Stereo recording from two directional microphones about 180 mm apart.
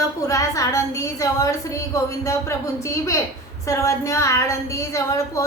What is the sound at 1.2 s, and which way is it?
A woman's voice, 20° left (ahead or behind).